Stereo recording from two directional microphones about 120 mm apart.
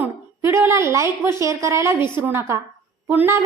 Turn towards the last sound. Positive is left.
turn(degrees=-15)  # may be behind; listen again after turning